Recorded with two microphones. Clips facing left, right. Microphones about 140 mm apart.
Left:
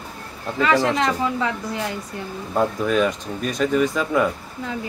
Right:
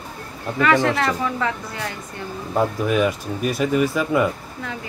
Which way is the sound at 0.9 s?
20° left (ahead or behind).